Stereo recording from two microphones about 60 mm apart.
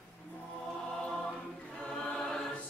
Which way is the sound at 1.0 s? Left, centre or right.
Centre.